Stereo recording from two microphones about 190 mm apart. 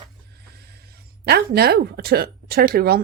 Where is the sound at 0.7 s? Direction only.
55° right (ahead or behind).